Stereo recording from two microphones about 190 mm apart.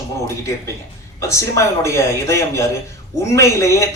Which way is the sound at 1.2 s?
15° left (ahead or behind).